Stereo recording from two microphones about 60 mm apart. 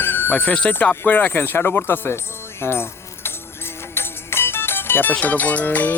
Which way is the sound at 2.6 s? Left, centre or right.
Left.